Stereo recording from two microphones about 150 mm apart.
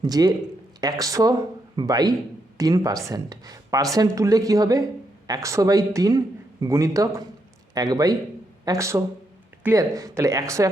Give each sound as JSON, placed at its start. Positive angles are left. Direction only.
{"t": 0.0, "sound": "speech", "side_deg": -30}